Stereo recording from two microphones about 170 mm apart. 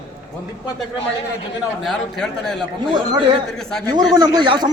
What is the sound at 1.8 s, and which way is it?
Speech, centre (ahead or behind).